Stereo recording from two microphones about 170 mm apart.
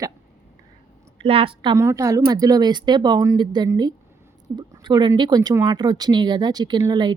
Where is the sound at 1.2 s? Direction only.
30° right (ahead or behind).